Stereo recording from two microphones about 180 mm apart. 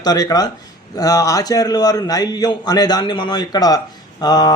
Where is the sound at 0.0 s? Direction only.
20° left (ahead or behind).